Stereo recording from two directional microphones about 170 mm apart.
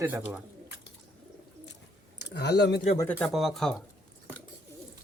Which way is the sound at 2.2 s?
85° left.